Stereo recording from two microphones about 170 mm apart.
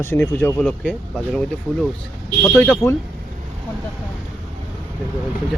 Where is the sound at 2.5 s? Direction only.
5° left (ahead or behind).